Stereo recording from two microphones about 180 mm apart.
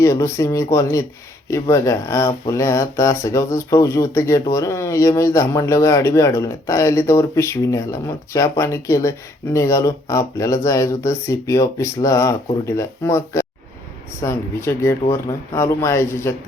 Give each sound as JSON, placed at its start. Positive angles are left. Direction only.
{"t": 0.0, "sound": "speech", "side_deg": 15}